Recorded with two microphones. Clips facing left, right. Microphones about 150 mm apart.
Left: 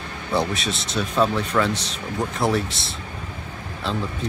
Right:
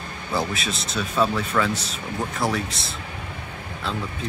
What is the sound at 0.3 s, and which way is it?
Speech, centre (ahead or behind).